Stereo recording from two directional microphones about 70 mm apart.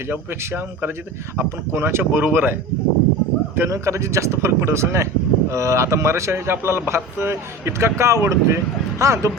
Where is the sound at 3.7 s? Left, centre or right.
Right.